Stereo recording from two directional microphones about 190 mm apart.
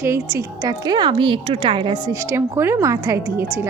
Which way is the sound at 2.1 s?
15° right (ahead or behind).